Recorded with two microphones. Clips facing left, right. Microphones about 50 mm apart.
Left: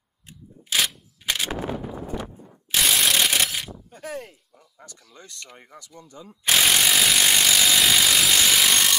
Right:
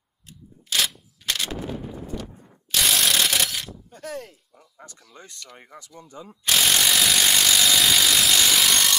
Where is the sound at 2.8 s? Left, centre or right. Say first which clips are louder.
Left 1 dB; centre.